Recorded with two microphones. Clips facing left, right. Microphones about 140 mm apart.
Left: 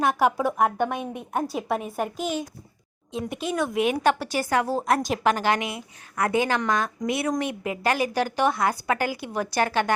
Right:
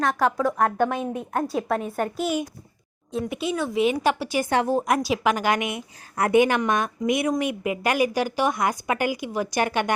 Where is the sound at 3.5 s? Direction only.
Centre (ahead or behind).